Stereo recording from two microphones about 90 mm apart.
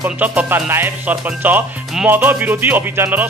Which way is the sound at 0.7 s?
25° right (ahead or behind).